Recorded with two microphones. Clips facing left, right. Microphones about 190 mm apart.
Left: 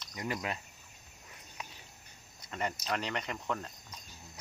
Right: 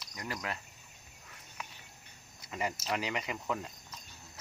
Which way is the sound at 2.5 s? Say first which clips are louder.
Even; 5° right (ahead or behind).